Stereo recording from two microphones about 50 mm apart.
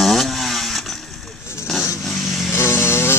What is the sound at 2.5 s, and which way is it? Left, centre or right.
Motorcycle, left.